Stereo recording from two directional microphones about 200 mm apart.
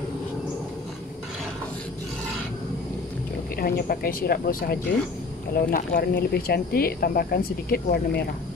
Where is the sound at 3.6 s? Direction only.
50° left (ahead or behind).